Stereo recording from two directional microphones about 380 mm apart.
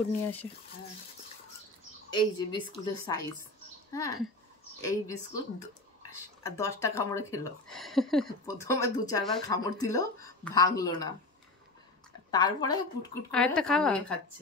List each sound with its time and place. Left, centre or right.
2.0 s speech: centre
12.3 s speech: centre